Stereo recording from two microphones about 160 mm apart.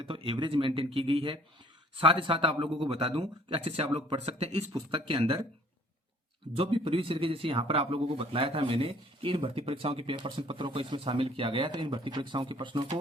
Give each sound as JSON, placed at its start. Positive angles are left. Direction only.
{"t": 0.0, "sound": "speech", "side_deg": -30}
{"t": 6.5, "sound": "speech", "side_deg": -35}